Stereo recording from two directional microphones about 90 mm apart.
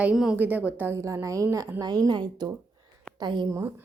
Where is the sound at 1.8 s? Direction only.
50° right (ahead or behind).